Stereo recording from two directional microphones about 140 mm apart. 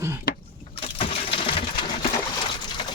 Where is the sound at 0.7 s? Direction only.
40° left (ahead or behind).